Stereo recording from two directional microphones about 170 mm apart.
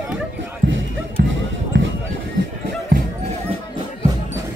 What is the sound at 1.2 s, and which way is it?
Basketball bounce, 90° right.